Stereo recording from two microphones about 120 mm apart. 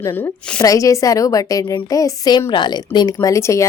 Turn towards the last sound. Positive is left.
turn(degrees=25)  # may be behind; listen again after turning